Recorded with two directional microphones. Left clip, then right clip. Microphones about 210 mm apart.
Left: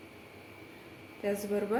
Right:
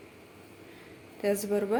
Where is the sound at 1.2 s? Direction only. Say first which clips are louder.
Right 5 dB; 30° right (ahead or behind).